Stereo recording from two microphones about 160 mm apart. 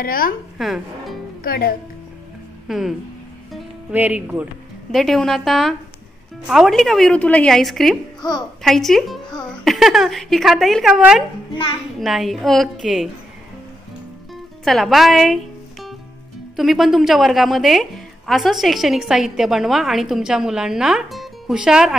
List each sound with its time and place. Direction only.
0.0 s a woman's voice: 65° left (ahead or behind)
0.6 s speech: centre (ahead or behind)
1.4 s speech: 65° left (ahead or behind)
2.7 s a woman's voice: centre (ahead or behind)
4.9 s a woman's voice: centre (ahead or behind)
8.2 s a woman's voice: 25° left (ahead or behind)
8.6 s a woman's voice: centre (ahead or behind)
14.6 s a woman's voice: centre (ahead or behind)